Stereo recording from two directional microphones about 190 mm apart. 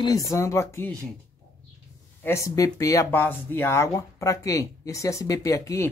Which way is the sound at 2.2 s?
15° left (ahead or behind).